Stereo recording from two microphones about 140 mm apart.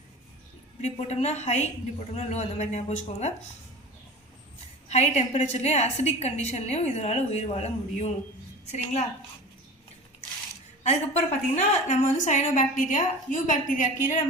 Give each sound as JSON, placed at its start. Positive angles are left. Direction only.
{"t": 1.0, "sound": "a woman's voice", "side_deg": 50}
{"t": 4.9, "sound": "a woman's voice", "side_deg": 50}
{"t": 10.8, "sound": "a woman's voice", "side_deg": 55}